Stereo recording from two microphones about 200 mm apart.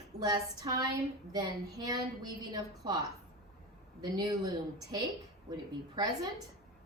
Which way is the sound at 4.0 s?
20° right (ahead or behind).